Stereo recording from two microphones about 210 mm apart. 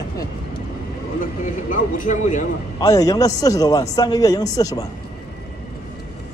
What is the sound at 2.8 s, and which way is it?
A man's voice, 15° left (ahead or behind).